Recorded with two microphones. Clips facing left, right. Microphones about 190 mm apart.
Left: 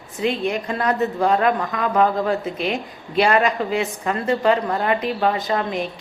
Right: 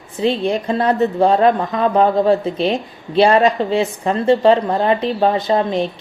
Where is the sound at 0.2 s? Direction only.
30° right (ahead or behind).